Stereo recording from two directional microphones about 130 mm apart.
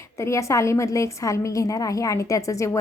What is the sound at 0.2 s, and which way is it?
A woman's voice, 25° left (ahead or behind).